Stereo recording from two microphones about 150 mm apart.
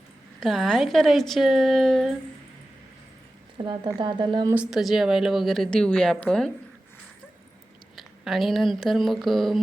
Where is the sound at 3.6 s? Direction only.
40° right (ahead or behind).